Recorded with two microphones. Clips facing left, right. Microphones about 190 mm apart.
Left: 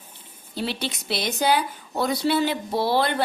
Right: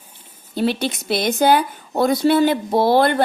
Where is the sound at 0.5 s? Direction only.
50° right (ahead or behind).